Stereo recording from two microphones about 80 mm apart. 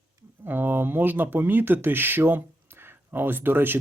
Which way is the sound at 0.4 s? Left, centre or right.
Right.